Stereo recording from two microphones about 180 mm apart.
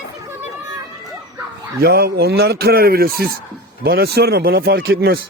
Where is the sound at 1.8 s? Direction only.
60° right (ahead or behind).